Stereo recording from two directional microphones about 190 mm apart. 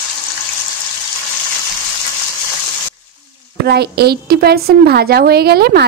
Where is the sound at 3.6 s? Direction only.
60° right (ahead or behind).